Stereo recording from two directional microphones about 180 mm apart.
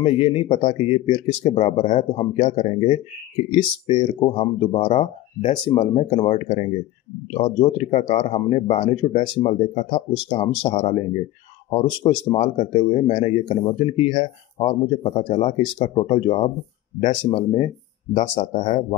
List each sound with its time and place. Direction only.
0.0 s speech: 30° left (ahead or behind)